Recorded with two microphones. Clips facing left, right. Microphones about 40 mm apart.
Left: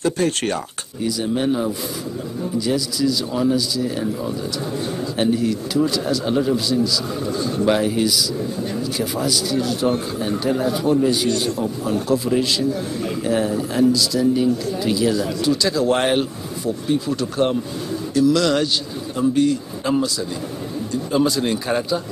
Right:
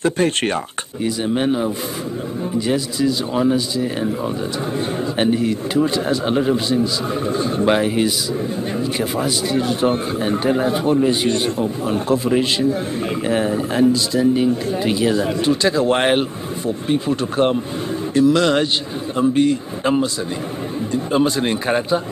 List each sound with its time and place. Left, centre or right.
0.0 s speech: right